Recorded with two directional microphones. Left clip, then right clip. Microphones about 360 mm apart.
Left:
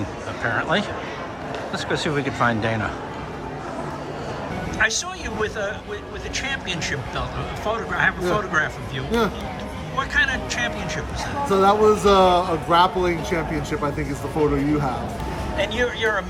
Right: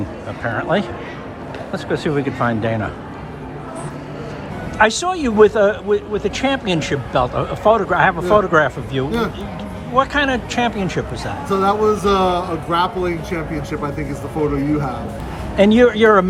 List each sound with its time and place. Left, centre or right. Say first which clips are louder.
0.4 s speech: right 3 dB; centre
4.8 s speech: right 8 dB; centre
15.5 s speech: right 11 dB; centre